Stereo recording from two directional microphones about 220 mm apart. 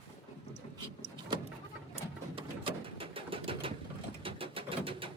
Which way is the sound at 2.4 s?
25° right (ahead or behind).